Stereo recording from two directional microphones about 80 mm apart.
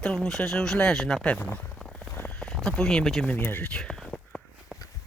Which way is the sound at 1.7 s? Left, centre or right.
Centre.